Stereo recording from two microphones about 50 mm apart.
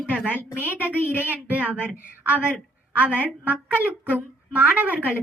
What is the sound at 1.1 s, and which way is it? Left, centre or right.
Child singing, right.